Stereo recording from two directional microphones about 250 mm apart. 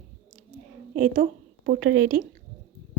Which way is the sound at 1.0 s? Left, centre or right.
Right.